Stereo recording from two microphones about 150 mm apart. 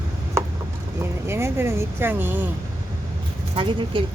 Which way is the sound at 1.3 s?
15° right (ahead or behind).